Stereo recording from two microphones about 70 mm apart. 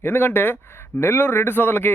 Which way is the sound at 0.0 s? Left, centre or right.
Left.